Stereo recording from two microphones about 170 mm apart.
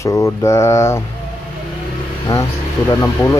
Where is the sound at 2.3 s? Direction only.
20° left (ahead or behind).